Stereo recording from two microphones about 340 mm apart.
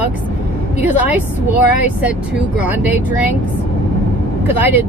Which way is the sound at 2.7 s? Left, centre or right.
Centre.